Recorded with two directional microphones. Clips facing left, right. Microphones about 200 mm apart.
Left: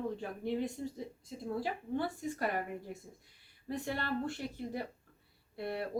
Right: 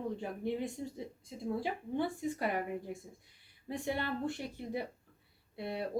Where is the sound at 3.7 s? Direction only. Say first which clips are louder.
Right 1 dB; 20° right (ahead or behind).